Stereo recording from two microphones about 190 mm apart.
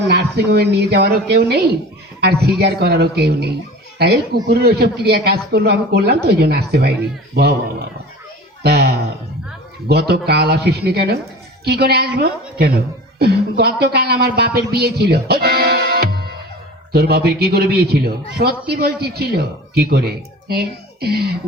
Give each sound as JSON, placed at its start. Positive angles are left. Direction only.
{"t": 0.1, "sound": "a man's voice", "side_deg": -60}
{"t": 8.6, "sound": "a sound", "side_deg": -55}
{"t": 9.9, "sound": "a man's voice", "side_deg": -60}